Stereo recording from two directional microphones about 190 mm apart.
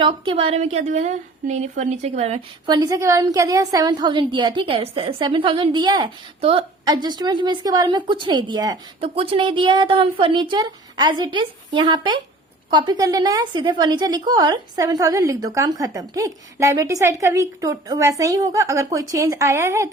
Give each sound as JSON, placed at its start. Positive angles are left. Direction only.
{"t": 0.0, "sound": "a woman's voice", "side_deg": -25}
{"t": 2.6, "sound": "a woman's voice", "side_deg": -20}